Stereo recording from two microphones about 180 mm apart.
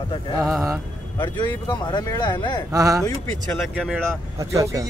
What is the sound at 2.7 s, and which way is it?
Speech, 20° right (ahead or behind).